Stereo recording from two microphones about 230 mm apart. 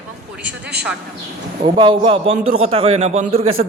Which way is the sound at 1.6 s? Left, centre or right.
Right.